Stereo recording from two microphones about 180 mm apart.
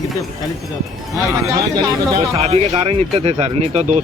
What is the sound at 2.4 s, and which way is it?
Speech, 35° right (ahead or behind).